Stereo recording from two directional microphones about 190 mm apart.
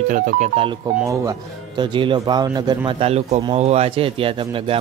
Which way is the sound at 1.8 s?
25° right (ahead or behind).